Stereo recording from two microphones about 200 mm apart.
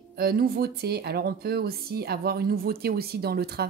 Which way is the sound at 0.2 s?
50° right (ahead or behind).